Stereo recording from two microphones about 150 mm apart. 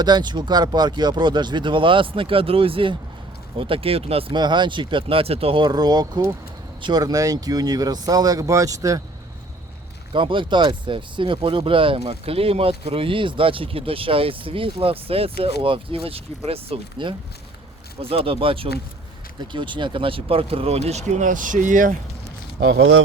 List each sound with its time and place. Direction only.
0.0 s speech: 30° right (ahead or behind)
10.1 s speech: 35° right (ahead or behind); by 21.9 s 60° right (ahead or behind)